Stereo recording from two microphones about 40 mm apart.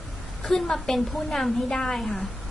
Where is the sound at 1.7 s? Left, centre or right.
Centre.